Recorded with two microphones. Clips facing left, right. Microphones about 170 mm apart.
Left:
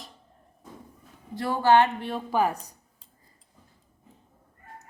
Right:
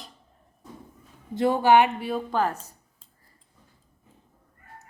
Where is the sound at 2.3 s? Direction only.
10° left (ahead or behind).